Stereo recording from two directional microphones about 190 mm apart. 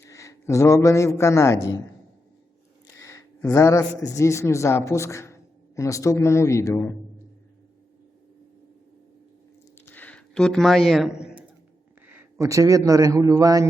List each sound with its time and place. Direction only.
0.0 s a man's voice: 15° left (ahead or behind)
2.8 s a man's voice: 15° left (ahead or behind)
9.8 s a sound: 10° left (ahead or behind)
12.0 s a man's voice: 10° right (ahead or behind)